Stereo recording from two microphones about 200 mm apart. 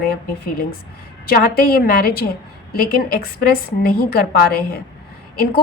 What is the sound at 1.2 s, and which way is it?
A woman's voice, 50° left (ahead or behind).